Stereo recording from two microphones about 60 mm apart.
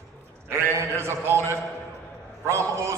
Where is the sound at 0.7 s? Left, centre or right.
Right.